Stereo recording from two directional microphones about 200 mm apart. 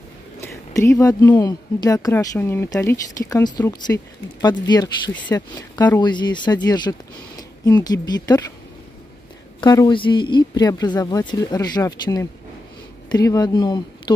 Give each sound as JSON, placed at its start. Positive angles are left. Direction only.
{"t": 0.4, "sound": "speech", "side_deg": 15}
{"t": 9.6, "sound": "speech", "side_deg": 20}